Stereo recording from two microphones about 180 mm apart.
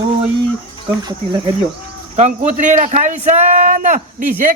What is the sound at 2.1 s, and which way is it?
A man's voice, 40° right (ahead or behind).